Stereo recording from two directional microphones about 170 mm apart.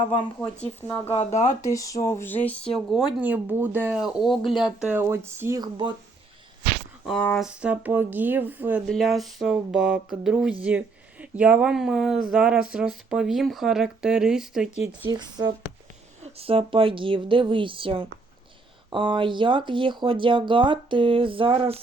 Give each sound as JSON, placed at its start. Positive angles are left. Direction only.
{"t": 0.6, "sound": "speech", "side_deg": 10}
{"t": 1.0, "sound": "speech", "side_deg": 35}
{"t": 1.6, "sound": "speech", "side_deg": 20}
{"t": 2.7, "sound": "speech", "side_deg": 0}
{"t": 7.2, "sound": "speech", "side_deg": 10}
{"t": 7.4, "sound": "speech", "side_deg": -5}
{"t": 8.9, "sound": "a sound", "side_deg": 0}
{"t": 15.0, "sound": "speech", "side_deg": -25}
{"t": 16.2, "sound": "a woman's voice", "side_deg": -35}